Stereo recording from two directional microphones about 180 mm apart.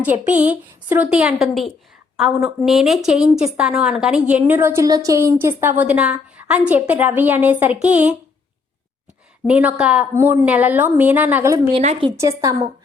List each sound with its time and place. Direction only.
0.0 s a woman's voice: 10° right (ahead or behind)
9.5 s a woman's voice: 5° right (ahead or behind)
11.7 s a woman's voice: 35° right (ahead or behind)
12.4 s a woman's voice: 20° right (ahead or behind)